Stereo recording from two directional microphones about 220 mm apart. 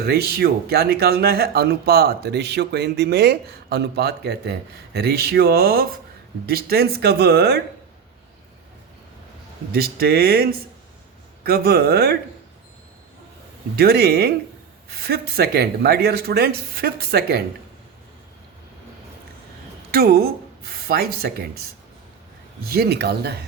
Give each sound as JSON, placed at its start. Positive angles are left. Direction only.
{"t": 0.0, "sound": "speech", "side_deg": -45}
{"t": 9.7, "sound": "speech", "side_deg": -45}
{"t": 13.7, "sound": "speech", "side_deg": -45}
{"t": 19.9, "sound": "speech", "side_deg": -45}
{"t": 22.7, "sound": "speech", "side_deg": -45}